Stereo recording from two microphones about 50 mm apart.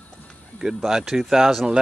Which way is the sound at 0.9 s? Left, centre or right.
Centre.